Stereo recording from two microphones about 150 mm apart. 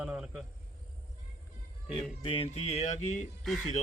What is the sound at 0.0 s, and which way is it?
Speech, 5° right (ahead or behind).